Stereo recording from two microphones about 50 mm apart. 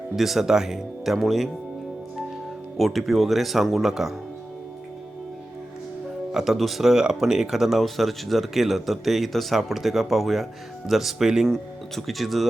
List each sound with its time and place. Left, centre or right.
0.2 s speech: centre
2.7 s speech: centre
6.3 s speech: centre
6.9 s speech: centre
11.4 s speech: centre